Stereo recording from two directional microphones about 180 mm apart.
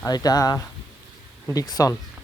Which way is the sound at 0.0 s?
20° left (ahead or behind).